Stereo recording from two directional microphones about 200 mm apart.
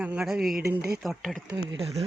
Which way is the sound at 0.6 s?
50° right (ahead or behind).